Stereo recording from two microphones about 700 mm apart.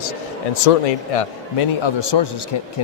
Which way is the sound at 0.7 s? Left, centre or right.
Left.